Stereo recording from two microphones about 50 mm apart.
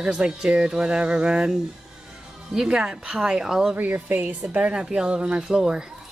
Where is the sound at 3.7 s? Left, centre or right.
Right.